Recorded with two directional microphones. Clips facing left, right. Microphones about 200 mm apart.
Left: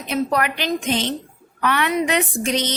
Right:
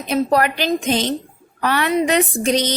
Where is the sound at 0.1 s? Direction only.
35° right (ahead or behind).